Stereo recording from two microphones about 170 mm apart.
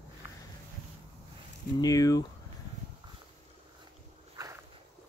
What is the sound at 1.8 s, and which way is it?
Speech, 20° left (ahead or behind).